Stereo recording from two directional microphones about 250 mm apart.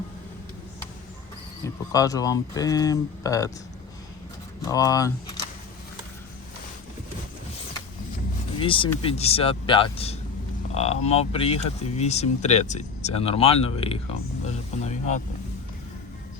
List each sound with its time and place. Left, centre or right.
1.6 s speech: centre
4.6 s speech: centre
8.5 s speech: left